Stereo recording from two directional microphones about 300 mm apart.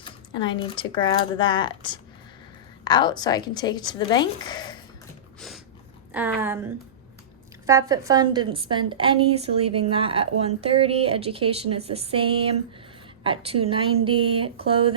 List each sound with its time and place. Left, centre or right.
0.0 s speech: centre
6.1 s a woman's voice: centre
7.7 s a woman's voice: centre